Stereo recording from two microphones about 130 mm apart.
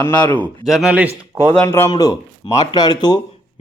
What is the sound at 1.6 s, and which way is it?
Speech, 20° left (ahead or behind).